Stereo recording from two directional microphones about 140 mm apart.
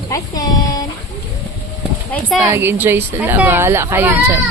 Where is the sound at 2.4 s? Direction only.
15° right (ahead or behind).